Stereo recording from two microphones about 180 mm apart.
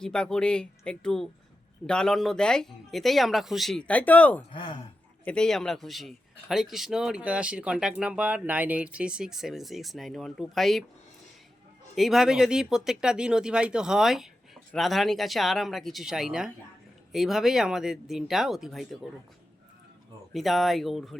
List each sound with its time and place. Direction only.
0.0 s a man's voice: 5° left (ahead or behind)
4.5 s speech: 25° left (ahead or behind)
5.2 s a man's voice: 5° left (ahead or behind)
11.9 s a man's voice: centre (ahead or behind)
20.3 s a man's voice: centre (ahead or behind)